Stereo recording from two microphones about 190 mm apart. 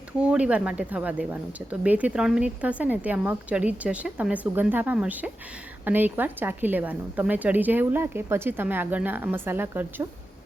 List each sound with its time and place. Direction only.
0.2 s speech: 5° right (ahead or behind)